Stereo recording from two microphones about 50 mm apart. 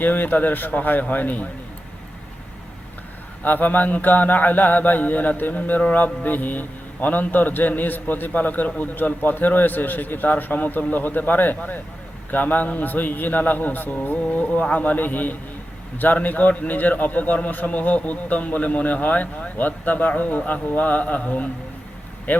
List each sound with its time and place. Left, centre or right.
0.0 s mantra: left
3.4 s mantra: left
22.3 s speech: left